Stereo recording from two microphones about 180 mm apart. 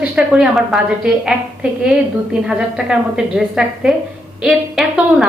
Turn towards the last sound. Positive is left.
turn(degrees=0)  # may be behind; listen again after turning